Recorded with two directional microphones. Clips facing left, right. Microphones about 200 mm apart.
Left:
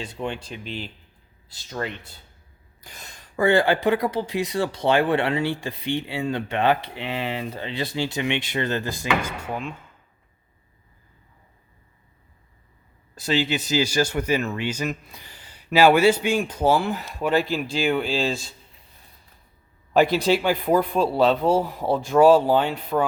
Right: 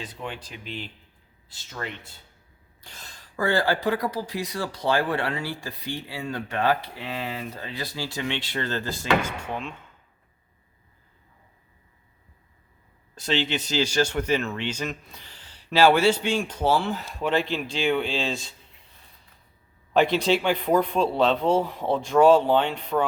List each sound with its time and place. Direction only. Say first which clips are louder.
0.0 s speech: left 5 dB; 25° left (ahead or behind)
1.8 s speech: left 5 dB; 35° left (ahead or behind)
2.8 s speech: left 2 dB; 15° left (ahead or behind)
13.2 s speech: left 3 dB; 5° left (ahead or behind)
19.9 s speech: left 2 dB; 5° left (ahead or behind)